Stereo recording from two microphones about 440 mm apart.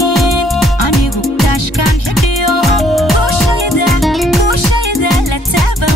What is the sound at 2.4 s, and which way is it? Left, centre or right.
Music, centre.